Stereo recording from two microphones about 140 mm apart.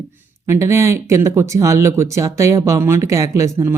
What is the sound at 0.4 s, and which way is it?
Speech, 20° right (ahead or behind).